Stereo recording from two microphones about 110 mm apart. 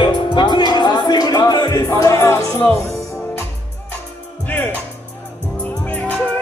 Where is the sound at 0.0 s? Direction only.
45° left (ahead or behind); by 2.7 s 25° left (ahead or behind).